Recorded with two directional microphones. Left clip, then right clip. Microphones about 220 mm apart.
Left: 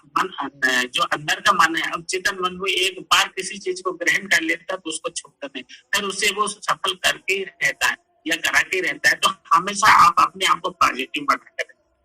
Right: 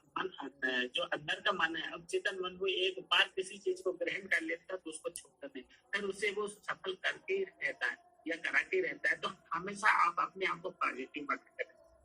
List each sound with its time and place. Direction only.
0.2 s speech: 45° left (ahead or behind)